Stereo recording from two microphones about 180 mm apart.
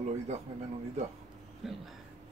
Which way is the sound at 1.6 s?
Centre (ahead or behind).